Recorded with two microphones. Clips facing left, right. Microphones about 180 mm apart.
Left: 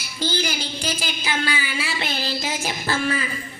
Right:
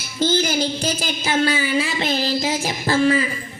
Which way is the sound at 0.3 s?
40° right (ahead or behind).